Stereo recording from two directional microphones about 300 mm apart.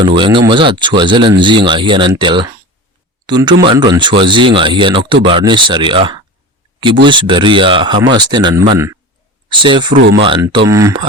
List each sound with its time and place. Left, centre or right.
0.0 s speech: centre